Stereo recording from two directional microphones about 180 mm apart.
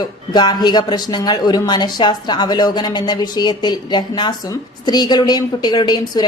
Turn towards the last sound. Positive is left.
turn(degrees=25)  # may be behind; listen again after turning